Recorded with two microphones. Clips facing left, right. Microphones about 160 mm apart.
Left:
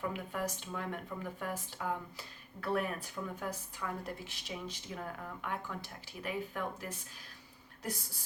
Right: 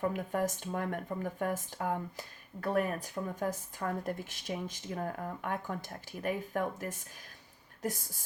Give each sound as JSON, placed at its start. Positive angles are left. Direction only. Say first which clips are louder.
{"t": 0.0, "sound": "speech", "louder": "right 5 dB", "side_deg": -45}